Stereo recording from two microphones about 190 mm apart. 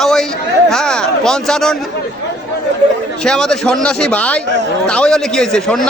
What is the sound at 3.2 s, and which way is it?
A man's voice, centre (ahead or behind).